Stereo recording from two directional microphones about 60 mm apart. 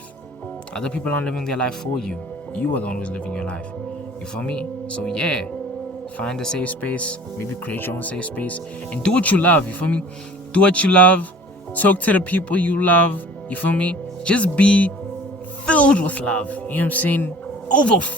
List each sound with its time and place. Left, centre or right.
0.7 s speech: centre
2.6 s speech: left; by 6.6 s centre
6.6 s speech: left
7.6 s speech: left
8.1 s speech: left